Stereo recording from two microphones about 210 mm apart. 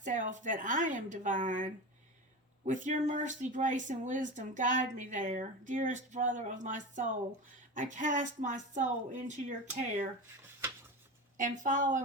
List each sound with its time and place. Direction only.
0.0 s speech: 35° right (ahead or behind)
11.3 s speech: 35° right (ahead or behind)